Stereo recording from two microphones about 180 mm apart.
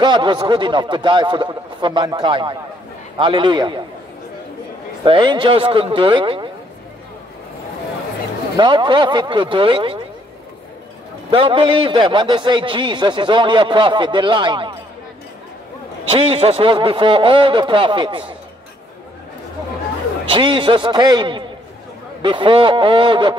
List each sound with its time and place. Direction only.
0.0 s a man's voice: 25° right (ahead or behind)
5.0 s a man's voice: 25° right (ahead or behind)
8.5 s a man's voice: 25° right (ahead or behind)
11.2 s a man's voice: 30° right (ahead or behind)
16.1 s a man's voice: 30° right (ahead or behind)
20.2 s a man's voice: 30° right (ahead or behind)